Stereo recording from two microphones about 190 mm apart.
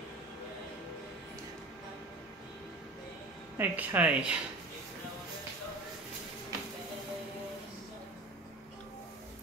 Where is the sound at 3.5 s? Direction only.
10° right (ahead or behind).